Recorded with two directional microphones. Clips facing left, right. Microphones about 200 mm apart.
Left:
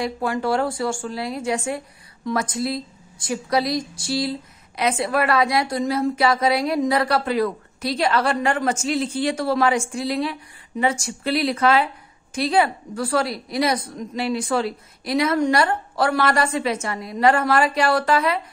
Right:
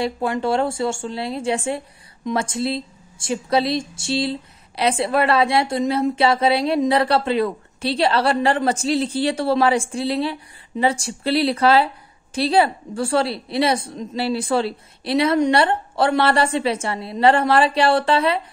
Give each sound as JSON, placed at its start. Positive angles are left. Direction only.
{"t": 0.0, "sound": "a woman's voice", "side_deg": -25}